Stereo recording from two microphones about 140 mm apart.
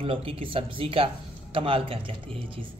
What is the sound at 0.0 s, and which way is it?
A man's voice, 40° right (ahead or behind).